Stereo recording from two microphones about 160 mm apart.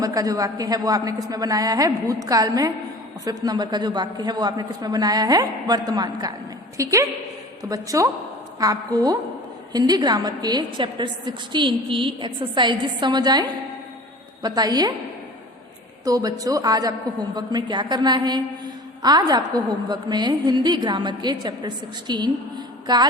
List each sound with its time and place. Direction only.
0.0 s a woman's voice: 20° right (ahead or behind)
14.4 s a woman's voice: 25° right (ahead or behind)
16.0 s a woman's voice: 20° right (ahead or behind)